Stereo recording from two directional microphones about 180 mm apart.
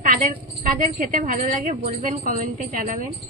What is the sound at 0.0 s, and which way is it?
A woman's voice, 50° right (ahead or behind).